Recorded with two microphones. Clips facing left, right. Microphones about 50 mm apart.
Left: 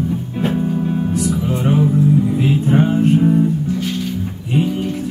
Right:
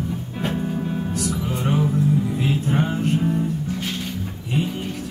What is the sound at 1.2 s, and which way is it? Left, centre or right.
Music, centre.